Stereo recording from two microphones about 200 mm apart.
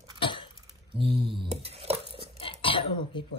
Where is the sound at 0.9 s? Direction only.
25° right (ahead or behind).